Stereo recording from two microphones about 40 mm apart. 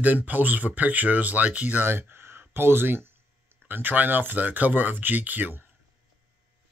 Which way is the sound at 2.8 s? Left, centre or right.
Right.